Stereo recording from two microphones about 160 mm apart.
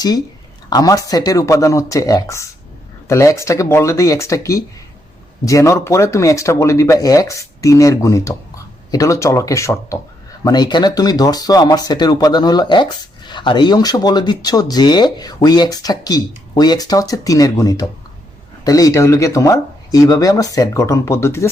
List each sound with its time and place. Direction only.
0.7 s speech: 20° left (ahead or behind)